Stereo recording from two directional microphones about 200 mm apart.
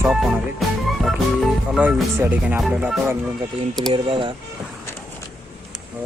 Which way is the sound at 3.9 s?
25° right (ahead or behind).